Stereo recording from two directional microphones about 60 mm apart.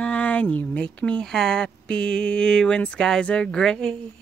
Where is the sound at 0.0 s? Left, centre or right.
Left.